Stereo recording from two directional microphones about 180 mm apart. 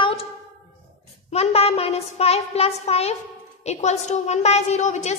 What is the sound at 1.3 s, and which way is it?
A woman's voice, 35° left (ahead or behind).